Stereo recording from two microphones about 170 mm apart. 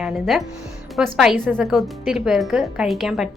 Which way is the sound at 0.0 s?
Centre (ahead or behind).